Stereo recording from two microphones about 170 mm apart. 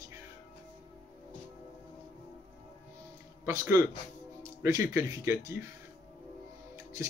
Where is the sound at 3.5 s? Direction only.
20° right (ahead or behind).